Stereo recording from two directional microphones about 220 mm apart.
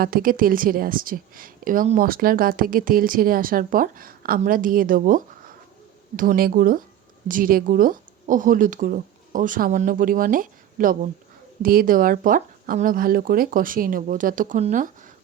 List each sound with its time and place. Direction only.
0.0 s a woman's voice: 40° right (ahead or behind)